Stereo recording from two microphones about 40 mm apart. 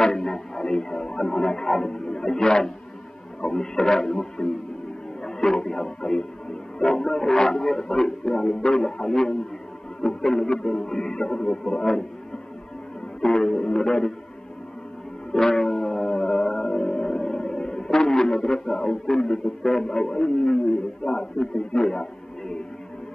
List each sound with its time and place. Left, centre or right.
0.0 s speech: centre
3.3 s music: centre
5.2 s speech: centre
6.8 s music: centre
13.2 s music: centre
15.3 s music: centre